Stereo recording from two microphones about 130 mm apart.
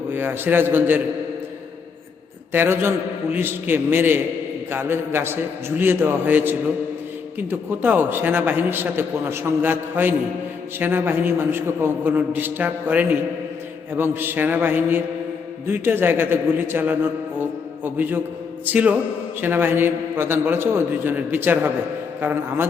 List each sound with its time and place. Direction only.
0.1 s a man's voice: 15° right (ahead or behind)
2.5 s a man's voice: 15° right (ahead or behind)